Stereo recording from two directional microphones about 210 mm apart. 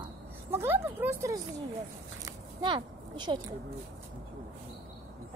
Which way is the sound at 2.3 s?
20° right (ahead or behind).